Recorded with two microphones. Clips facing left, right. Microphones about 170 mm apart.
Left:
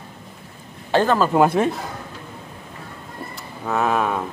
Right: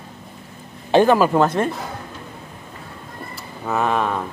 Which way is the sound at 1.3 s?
5° left (ahead or behind).